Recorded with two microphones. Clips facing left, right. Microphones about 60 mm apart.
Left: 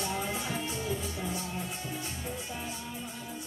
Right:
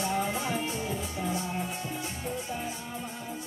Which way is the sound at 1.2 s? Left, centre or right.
Centre.